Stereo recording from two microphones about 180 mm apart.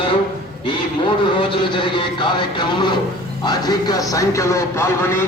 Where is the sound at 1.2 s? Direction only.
25° left (ahead or behind).